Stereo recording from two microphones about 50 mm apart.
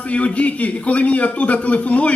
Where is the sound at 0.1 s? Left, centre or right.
Left.